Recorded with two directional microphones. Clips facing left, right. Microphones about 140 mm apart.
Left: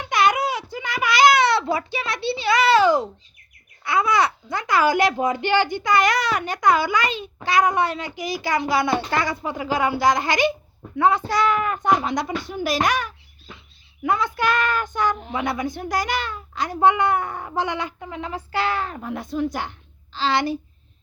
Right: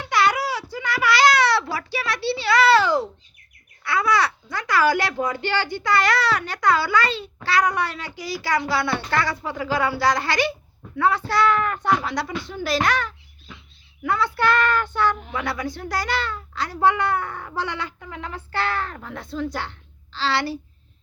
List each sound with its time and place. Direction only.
0.0 s a sound: 20° left (ahead or behind)
3.8 s a child's voice: 20° left (ahead or behind)
12.5 s child singing: 15° left (ahead or behind)
14.0 s a child's voice: 20° left (ahead or behind)
14.3 s child singing: 15° left (ahead or behind)
20.1 s a child's voice: 20° left (ahead or behind)